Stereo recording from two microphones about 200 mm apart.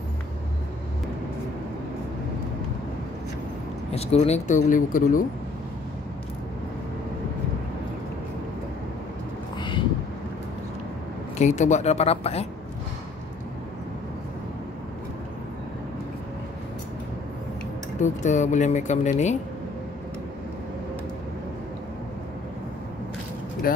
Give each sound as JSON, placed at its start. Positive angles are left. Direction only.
{"t": 3.9, "sound": "speech", "side_deg": 30}
{"t": 9.6, "sound": "a sound", "side_deg": 25}
{"t": 11.3, "sound": "speech", "side_deg": 35}
{"t": 18.0, "sound": "speech", "side_deg": 35}